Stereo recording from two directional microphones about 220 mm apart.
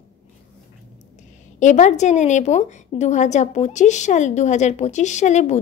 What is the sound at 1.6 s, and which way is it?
Speech, 35° left (ahead or behind).